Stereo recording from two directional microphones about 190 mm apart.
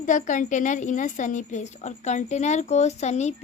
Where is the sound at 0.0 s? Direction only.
40° left (ahead or behind).